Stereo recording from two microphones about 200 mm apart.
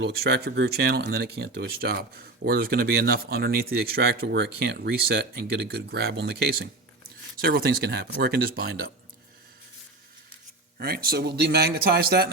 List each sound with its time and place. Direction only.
0.0 s speech: 55° right (ahead or behind)
10.8 s speech: 50° right (ahead or behind)